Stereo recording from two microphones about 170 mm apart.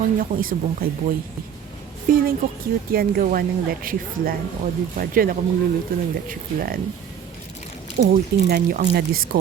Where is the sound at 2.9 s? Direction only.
60° right (ahead or behind).